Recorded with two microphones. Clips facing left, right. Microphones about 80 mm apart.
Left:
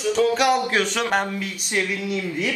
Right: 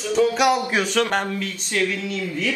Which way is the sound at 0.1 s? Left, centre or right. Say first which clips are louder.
Right 1 dB; centre.